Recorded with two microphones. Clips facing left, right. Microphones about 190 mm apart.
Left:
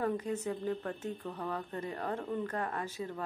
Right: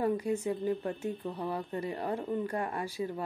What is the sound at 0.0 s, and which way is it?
A woman's voice, 10° right (ahead or behind).